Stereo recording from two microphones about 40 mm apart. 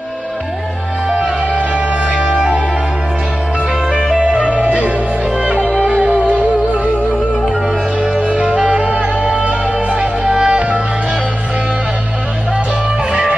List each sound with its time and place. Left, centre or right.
1.0 s music: right
3.9 s music: centre
4.2 s music: right
5.6 s music: left
5.9 s music: right
8.0 s music: right
10.2 s music: centre